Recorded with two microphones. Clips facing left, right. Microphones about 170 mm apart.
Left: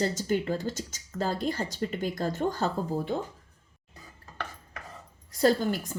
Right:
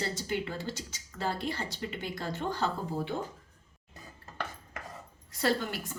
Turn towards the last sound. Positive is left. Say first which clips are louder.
# left 6 dB
turn(degrees=40)  # may be behind; listen again after turning